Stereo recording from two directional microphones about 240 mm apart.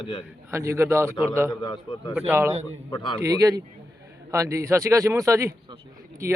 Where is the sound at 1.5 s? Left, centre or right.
Centre.